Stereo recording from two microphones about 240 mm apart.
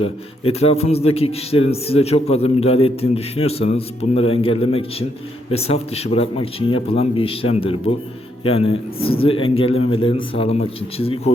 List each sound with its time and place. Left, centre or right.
0.0 s a man's voice: left